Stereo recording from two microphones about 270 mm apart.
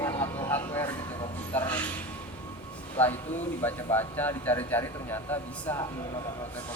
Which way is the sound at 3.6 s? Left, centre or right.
Centre.